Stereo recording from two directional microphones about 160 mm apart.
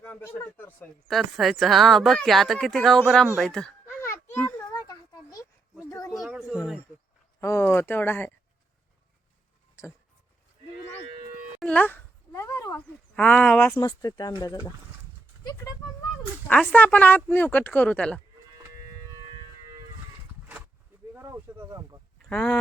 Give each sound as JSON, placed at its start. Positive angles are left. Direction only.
{"t": 0.0, "sound": "speech", "side_deg": 10}
{"t": 4.7, "sound": "a sound", "side_deg": 20}
{"t": 6.2, "sound": "a sound", "side_deg": -5}
{"t": 7.4, "sound": "speech", "side_deg": 15}
{"t": 9.8, "sound": "speech", "side_deg": 15}
{"t": 11.6, "sound": "a sound", "side_deg": 10}
{"t": 13.1, "sound": "speech", "side_deg": 10}
{"t": 13.8, "sound": "speech", "side_deg": 25}
{"t": 16.5, "sound": "speech", "side_deg": 10}
{"t": 21.2, "sound": "speech", "side_deg": -15}
{"t": 22.3, "sound": "speech", "side_deg": 5}